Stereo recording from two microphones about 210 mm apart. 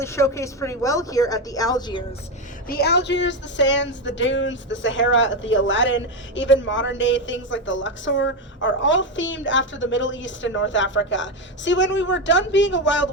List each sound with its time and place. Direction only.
0.0 s a woman's voice: 15° left (ahead or behind)
2.6 s speech: 50° left (ahead or behind)